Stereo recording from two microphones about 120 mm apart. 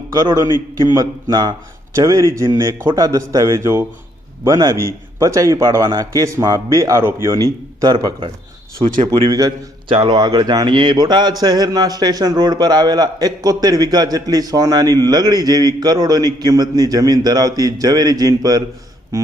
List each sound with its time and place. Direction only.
0.2 s a man's voice: 30° right (ahead or behind)
9.9 s speech: 50° right (ahead or behind)
10.2 s speech: 35° right (ahead or behind)
19.1 s a sound: 25° right (ahead or behind)